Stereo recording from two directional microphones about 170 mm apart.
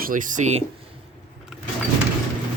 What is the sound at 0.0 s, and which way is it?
Speech, 50° right (ahead or behind).